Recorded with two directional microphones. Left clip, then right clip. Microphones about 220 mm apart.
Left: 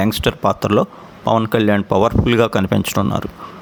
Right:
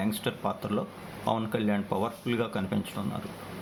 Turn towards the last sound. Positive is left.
turn(degrees=50)  # may be behind; listen again after turning